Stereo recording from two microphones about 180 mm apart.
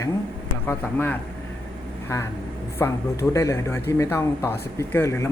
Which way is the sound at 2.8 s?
15° left (ahead or behind).